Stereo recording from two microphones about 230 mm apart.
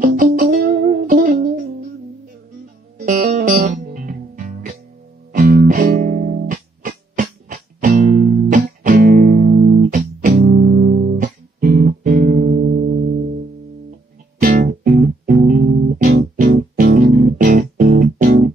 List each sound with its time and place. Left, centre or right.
0.0 s music: right
3.0 s music: right
14.4 s music: right